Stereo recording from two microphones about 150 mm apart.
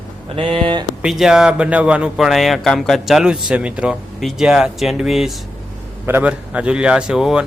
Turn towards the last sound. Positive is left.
turn(degrees=-5)  # may be behind; listen again after turning